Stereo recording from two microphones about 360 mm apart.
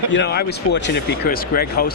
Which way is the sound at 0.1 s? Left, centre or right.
Left.